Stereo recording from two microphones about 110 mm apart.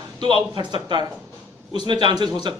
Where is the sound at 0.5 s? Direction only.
45° right (ahead or behind).